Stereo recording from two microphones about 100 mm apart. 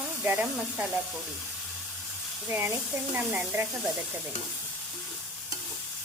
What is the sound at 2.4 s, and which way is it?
Speech, 20° right (ahead or behind).